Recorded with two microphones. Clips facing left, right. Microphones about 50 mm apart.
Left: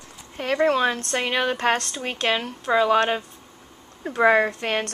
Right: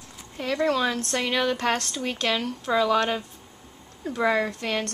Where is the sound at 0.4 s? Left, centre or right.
Left.